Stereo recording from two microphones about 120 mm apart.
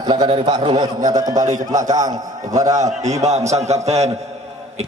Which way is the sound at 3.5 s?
65° right (ahead or behind).